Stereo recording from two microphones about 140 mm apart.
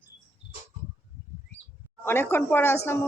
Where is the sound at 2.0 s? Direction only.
15° left (ahead or behind).